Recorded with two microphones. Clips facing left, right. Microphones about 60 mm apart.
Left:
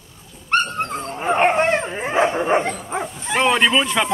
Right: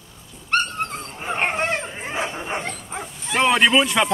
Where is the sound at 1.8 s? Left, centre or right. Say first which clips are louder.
Left 6 dB; left.